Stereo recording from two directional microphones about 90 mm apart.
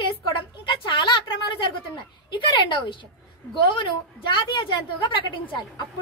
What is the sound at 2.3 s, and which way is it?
A woman's voice, 65° left (ahead or behind).